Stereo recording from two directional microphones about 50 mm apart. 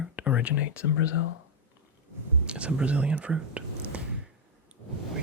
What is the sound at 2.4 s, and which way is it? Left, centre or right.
Speech, right.